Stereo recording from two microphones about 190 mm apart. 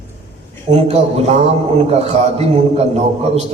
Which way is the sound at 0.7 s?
35° right (ahead or behind).